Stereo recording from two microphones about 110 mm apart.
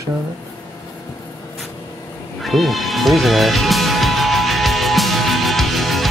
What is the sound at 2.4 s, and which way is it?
Music, centre (ahead or behind).